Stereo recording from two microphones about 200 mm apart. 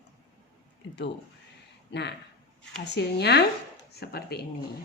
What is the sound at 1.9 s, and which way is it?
Speech, 60° left (ahead or behind).